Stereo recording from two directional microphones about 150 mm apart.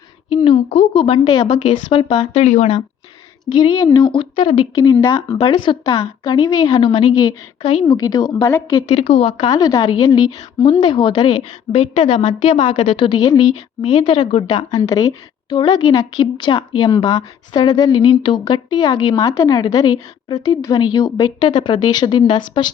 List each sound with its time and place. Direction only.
0.4 s a woman's voice: 45° left (ahead or behind)
2.3 s speech: 50° left (ahead or behind)
3.5 s speech: 30° left (ahead or behind)
4.8 s a woman's voice: 20° left (ahead or behind)
5.4 s a woman's voice: 30° left (ahead or behind)
8.9 s speech: 40° left (ahead or behind)
9.5 s a woman's voice: 25° left (ahead or behind)